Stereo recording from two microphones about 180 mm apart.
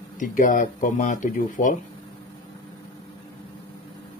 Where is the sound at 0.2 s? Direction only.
50° left (ahead or behind).